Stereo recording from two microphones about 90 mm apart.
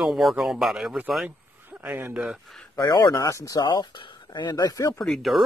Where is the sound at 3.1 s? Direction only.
35° left (ahead or behind).